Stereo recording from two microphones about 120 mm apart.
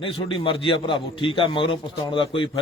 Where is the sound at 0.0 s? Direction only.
50° left (ahead or behind).